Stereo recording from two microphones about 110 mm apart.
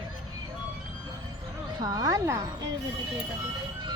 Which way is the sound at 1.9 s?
30° right (ahead or behind).